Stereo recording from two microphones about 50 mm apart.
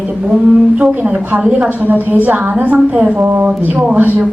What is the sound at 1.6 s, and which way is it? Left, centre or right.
A woman's voice, right.